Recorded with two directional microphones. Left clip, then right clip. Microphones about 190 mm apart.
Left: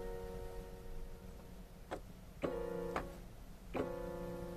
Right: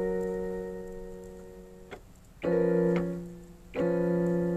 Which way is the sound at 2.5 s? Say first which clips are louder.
Right 19 dB; 45° right (ahead or behind).